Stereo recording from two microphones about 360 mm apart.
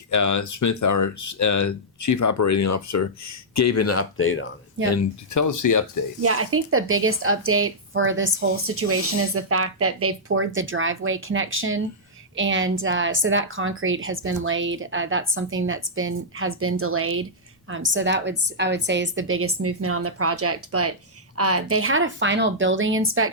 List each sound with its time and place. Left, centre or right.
0.1 s speech: left
4.9 s speech: left
6.2 s a woman's voice: right